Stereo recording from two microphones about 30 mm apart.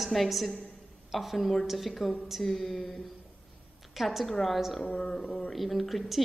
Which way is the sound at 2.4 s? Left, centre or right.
Centre.